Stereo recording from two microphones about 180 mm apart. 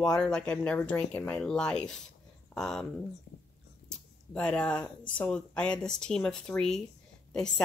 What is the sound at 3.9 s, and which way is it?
A woman's voice, 5° left (ahead or behind).